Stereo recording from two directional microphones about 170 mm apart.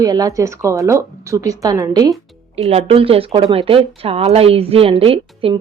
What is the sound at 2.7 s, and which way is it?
Speech, 35° right (ahead or behind).